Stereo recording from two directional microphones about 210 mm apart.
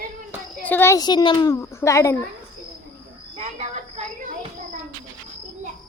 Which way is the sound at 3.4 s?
30° right (ahead or behind).